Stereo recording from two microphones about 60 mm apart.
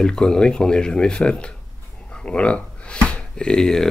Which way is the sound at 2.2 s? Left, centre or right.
Centre.